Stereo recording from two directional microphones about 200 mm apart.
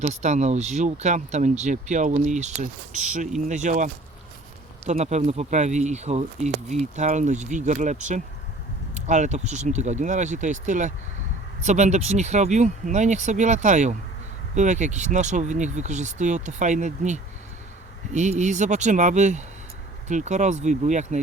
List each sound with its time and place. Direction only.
0.0 s speech: 35° right (ahead or behind)
4.9 s speech: 35° right (ahead or behind)